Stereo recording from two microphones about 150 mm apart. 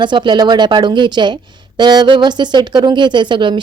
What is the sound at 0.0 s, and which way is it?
A woman's voice, 30° right (ahead or behind).